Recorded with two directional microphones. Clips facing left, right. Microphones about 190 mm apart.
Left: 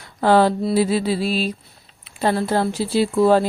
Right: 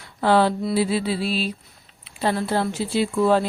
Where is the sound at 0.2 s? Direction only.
45° left (ahead or behind).